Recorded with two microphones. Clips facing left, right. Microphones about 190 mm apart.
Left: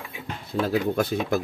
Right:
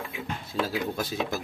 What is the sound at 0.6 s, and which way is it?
Speech, 60° left (ahead or behind).